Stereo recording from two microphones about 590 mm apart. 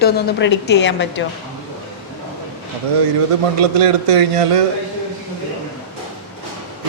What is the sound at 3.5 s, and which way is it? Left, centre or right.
A man's voice, right.